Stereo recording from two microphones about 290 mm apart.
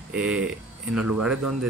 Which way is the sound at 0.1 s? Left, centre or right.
Centre.